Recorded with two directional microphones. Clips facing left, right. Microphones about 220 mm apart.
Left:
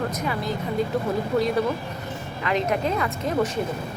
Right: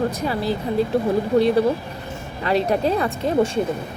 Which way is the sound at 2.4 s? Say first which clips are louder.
Right 4 dB; 35° right (ahead or behind).